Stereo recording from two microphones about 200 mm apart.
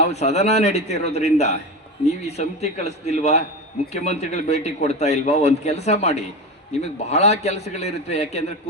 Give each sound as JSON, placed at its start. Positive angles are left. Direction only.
{"t": 0.0, "sound": "a man's voice", "side_deg": 35}